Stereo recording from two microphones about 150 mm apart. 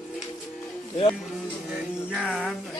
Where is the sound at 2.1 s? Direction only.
5° right (ahead or behind).